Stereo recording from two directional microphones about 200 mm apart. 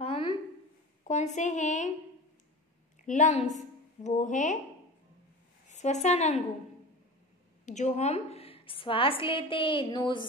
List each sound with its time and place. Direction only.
0.0 s a sound: 25° left (ahead or behind)
1.0 s a woman's voice: 35° left (ahead or behind)
3.1 s a woman's voice: 35° left (ahead or behind)
5.7 s a woman's voice: 35° left (ahead or behind)
7.6 s a woman's voice: 35° left (ahead or behind)